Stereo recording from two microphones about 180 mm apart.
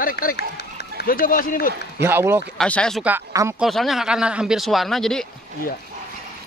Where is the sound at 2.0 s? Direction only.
15° right (ahead or behind).